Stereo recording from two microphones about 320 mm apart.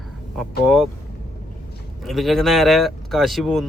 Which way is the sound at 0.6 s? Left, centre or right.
Centre.